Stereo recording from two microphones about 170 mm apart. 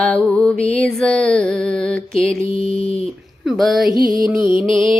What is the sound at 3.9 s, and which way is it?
Music, 55° right (ahead or behind).